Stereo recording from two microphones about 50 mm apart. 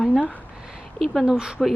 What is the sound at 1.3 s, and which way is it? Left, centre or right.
Speech, centre.